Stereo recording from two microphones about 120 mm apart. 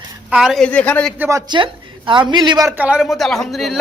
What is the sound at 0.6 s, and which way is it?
Speech, 10° left (ahead or behind).